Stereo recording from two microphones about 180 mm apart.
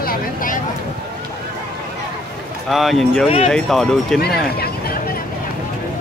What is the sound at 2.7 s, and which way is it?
Speech, centre (ahead or behind).